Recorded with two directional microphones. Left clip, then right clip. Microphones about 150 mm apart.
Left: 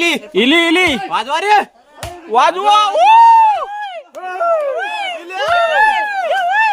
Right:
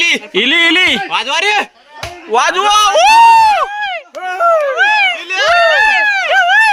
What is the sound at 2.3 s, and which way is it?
A man's voice, 5° left (ahead or behind).